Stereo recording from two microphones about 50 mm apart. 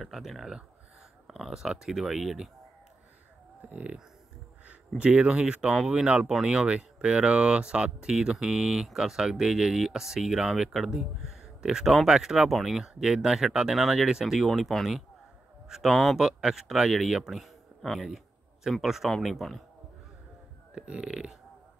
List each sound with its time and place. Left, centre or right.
0.0 s speech: centre
3.7 s speech: right; by 16.2 s centre
16.2 s speech: centre
20.7 s speech: centre